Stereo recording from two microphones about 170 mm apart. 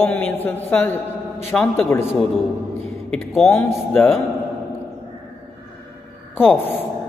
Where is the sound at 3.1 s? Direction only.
Centre (ahead or behind).